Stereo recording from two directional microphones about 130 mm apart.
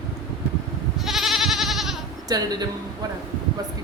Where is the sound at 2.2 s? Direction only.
30° right (ahead or behind).